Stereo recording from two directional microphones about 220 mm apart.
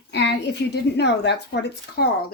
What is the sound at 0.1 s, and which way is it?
A woman's voice, 50° left (ahead or behind).